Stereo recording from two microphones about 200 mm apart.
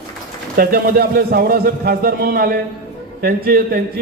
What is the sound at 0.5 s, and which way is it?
A man's voice, 50° right (ahead or behind).